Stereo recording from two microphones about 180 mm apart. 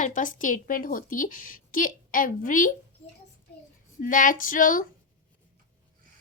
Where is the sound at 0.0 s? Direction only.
45° left (ahead or behind).